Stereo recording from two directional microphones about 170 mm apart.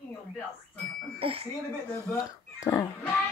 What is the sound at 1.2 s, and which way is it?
Speech, 35° right (ahead or behind).